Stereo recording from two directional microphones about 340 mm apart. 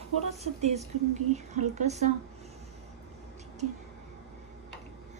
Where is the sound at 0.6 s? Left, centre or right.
Centre.